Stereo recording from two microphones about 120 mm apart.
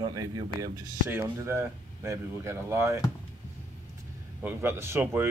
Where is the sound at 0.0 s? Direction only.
30° right (ahead or behind).